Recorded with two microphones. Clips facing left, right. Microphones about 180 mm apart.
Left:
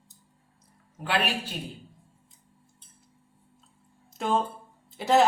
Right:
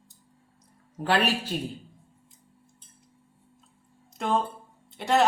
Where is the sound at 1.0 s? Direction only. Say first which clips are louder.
Right 4 dB; 40° right (ahead or behind).